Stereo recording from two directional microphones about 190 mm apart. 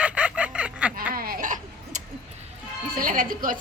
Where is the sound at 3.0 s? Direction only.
45° right (ahead or behind).